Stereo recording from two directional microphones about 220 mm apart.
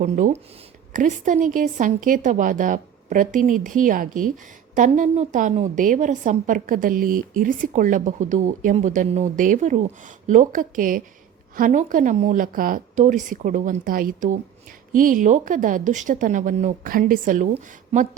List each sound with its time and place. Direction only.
0.0 s a woman's voice: 35° right (ahead or behind)